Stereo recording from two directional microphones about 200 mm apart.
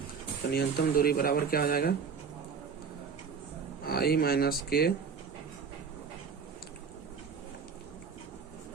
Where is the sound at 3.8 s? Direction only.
50° left (ahead or behind).